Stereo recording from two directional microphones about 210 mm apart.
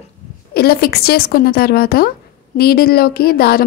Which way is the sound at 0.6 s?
45° left (ahead or behind).